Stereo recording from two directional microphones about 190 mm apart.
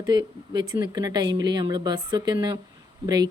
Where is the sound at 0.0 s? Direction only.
20° right (ahead or behind).